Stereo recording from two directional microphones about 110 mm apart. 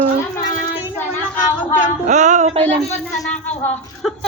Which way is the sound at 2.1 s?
90° right.